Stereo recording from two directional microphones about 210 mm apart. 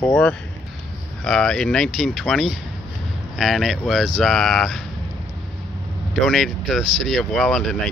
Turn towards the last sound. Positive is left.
turn(degrees=0)  # may be behind; listen again after turning